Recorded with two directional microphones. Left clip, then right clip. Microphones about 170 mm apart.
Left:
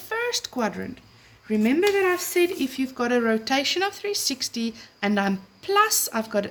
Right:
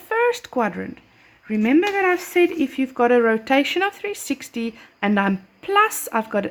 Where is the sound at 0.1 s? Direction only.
40° right (ahead or behind).